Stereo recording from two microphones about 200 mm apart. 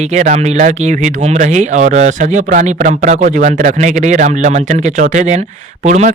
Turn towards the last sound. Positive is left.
turn(degrees=-35)  # may be behind; listen again after turning